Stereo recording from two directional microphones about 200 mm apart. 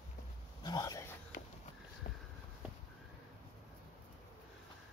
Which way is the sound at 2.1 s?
40° left (ahead or behind).